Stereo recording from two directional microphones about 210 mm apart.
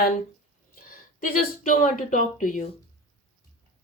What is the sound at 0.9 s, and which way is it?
Speech, 40° left (ahead or behind).